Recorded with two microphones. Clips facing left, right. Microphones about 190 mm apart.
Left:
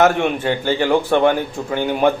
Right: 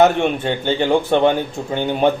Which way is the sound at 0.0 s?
25° right (ahead or behind).